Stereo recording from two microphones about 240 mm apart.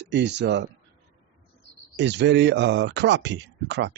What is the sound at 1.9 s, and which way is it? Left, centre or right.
A man's voice, right.